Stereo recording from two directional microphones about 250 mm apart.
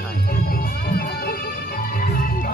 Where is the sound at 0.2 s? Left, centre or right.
Left.